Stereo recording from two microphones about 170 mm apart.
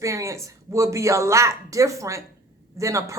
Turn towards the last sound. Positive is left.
turn(degrees=-20)  # may be behind; listen again after turning